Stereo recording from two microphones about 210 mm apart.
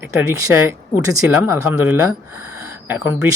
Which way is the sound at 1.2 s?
10° right (ahead or behind).